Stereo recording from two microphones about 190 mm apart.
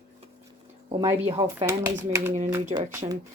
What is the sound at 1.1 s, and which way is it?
Speech, 35° right (ahead or behind).